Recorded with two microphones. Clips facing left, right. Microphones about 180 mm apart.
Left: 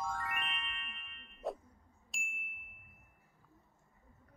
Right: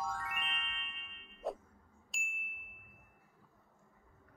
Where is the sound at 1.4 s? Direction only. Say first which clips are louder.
Even; centre (ahead or behind).